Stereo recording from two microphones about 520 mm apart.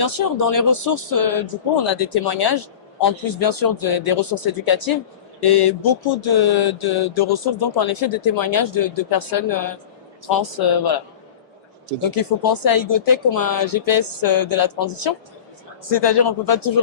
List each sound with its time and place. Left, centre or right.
0.0 s speech: left
12.1 s speech: left
15.8 s speech: left